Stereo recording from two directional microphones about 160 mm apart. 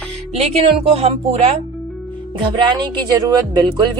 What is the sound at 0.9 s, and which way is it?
Speech, 40° right (ahead or behind).